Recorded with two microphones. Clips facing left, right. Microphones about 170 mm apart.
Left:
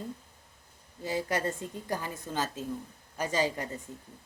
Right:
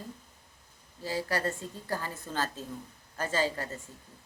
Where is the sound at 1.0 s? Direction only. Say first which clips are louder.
Left 1 dB; 20° left (ahead or behind).